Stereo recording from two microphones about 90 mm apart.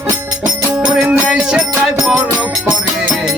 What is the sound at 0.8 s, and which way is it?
Music, 15° right (ahead or behind).